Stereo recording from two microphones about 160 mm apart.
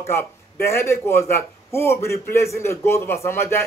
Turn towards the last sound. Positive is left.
turn(degrees=15)  # may be behind; listen again after turning